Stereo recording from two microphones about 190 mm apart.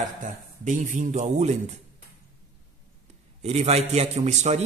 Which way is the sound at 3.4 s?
35° right (ahead or behind).